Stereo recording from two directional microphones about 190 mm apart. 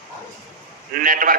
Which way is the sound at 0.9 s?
45° right (ahead or behind).